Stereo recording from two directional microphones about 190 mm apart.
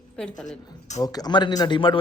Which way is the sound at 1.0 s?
20° left (ahead or behind).